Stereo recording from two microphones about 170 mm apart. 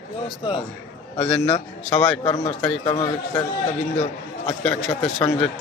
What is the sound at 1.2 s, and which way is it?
A man's voice, 5° left (ahead or behind).